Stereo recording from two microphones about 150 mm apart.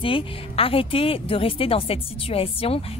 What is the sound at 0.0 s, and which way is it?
Speech, 35° left (ahead or behind).